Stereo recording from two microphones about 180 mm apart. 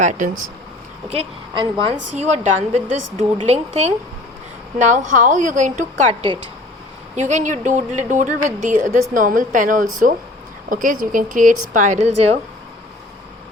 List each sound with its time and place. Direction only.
0.0 s a woman's voice: 45° right (ahead or behind)
1.8 s a woman's voice: 35° right (ahead or behind)
7.2 s a woman's voice: 40° right (ahead or behind)